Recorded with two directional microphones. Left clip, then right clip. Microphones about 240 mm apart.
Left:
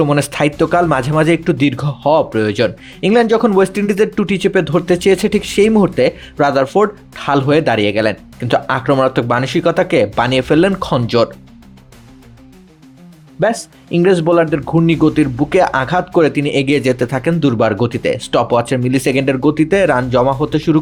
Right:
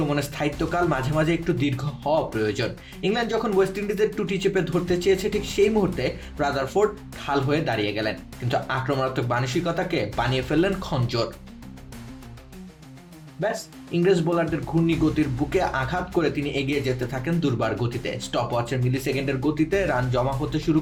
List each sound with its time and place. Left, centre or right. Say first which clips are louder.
0.1 s speech: left 11 dB; left
13.4 s speech: left 11 dB; left